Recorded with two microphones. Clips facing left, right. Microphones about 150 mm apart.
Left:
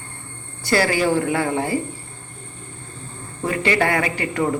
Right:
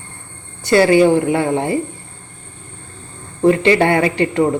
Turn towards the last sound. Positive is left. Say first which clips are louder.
# right 7 dB
turn(degrees=-25)  # may be behind; listen again after turning